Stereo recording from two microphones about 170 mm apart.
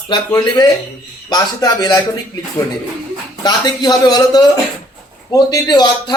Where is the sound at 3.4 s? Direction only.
25° left (ahead or behind).